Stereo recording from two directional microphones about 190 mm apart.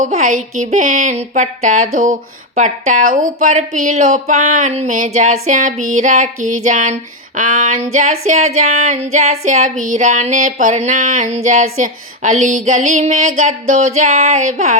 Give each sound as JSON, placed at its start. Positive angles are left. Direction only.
{"t": 0.0, "sound": "speech", "side_deg": -40}